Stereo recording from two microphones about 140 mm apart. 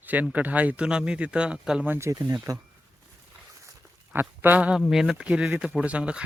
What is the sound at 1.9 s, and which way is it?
Speech, 20° right (ahead or behind).